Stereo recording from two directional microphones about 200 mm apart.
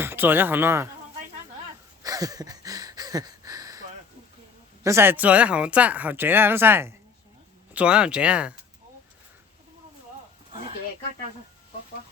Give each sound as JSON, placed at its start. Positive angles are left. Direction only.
{"t": 0.0, "sound": "speech", "side_deg": -10}
{"t": 2.0, "sound": "a sound", "side_deg": -20}
{"t": 4.8, "sound": "speech", "side_deg": -15}